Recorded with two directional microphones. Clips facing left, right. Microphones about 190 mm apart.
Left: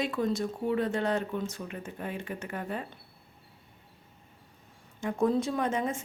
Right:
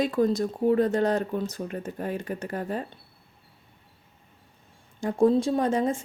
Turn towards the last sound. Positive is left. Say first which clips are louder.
# right 6 dB
turn(degrees=-35)  # may be behind; listen again after turning